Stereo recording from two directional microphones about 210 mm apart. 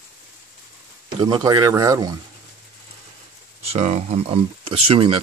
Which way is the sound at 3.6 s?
30° right (ahead or behind).